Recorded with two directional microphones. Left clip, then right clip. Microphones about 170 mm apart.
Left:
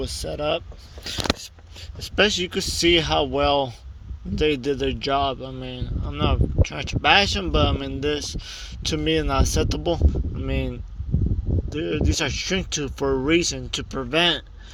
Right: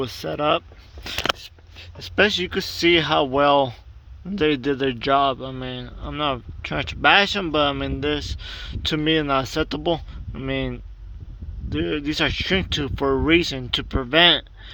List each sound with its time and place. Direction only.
0.0 s speech: 35° right (ahead or behind)
2.0 s speech: 10° right (ahead or behind)